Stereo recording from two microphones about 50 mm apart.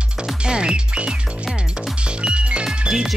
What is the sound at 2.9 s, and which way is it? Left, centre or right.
Music, centre.